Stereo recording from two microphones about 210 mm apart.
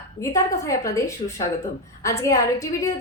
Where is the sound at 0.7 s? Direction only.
15° left (ahead or behind).